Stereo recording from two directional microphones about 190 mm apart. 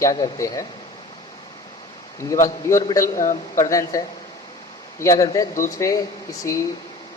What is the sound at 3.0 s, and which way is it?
Speech, 40° left (ahead or behind).